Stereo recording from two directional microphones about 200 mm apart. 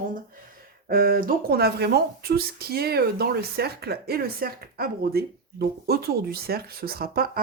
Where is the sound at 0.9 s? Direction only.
45° right (ahead or behind).